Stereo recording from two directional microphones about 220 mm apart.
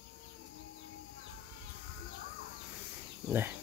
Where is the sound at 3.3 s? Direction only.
10° right (ahead or behind).